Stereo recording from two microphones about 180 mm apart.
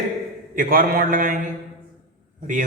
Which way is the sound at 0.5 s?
50° right (ahead or behind).